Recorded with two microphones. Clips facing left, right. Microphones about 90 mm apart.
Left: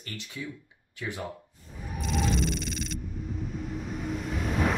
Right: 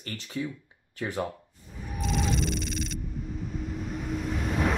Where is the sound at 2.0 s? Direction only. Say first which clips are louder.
Even; centre (ahead or behind).